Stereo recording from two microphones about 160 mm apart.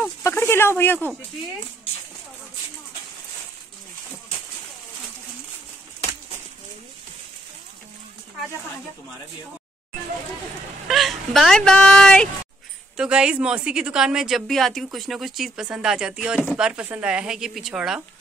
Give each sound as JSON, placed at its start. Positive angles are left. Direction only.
{"t": 0.2, "sound": "speech", "side_deg": 15}
{"t": 10.9, "sound": "speech", "side_deg": 0}